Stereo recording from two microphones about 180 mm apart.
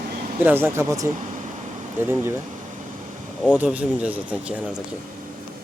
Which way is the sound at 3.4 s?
10° right (ahead or behind).